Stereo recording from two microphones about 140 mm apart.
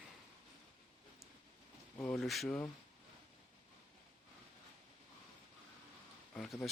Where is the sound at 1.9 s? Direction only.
20° left (ahead or behind).